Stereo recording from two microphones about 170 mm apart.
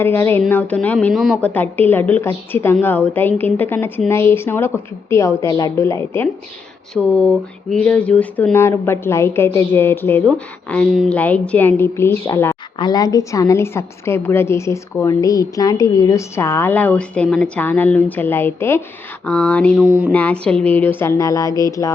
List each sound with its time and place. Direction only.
0.0 s a woman's voice: 15° left (ahead or behind)
1.4 s a woman's voice: 10° left (ahead or behind)
6.9 s a woman's voice: 5° left (ahead or behind)
19.8 s speech: 5° right (ahead or behind)
20.1 s a woman's voice: 10° left (ahead or behind)